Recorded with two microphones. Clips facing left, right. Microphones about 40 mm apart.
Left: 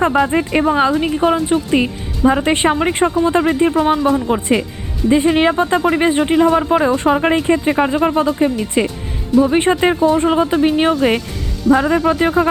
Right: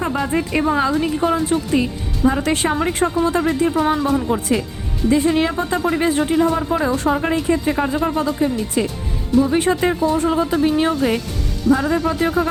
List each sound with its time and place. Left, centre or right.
0.0 s speech: left